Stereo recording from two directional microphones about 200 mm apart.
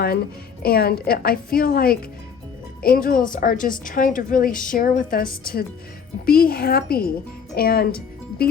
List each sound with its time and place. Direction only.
0.6 s a woman's voice: 50° left (ahead or behind)